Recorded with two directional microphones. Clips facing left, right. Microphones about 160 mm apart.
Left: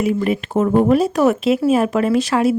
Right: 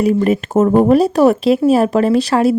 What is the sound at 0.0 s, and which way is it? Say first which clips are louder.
Speech: right 4 dB; 40° right (ahead or behind).